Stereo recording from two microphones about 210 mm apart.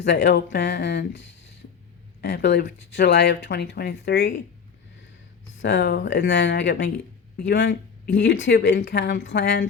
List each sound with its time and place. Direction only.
0.0 s speech: 55° left (ahead or behind)
5.6 s speech: 55° left (ahead or behind)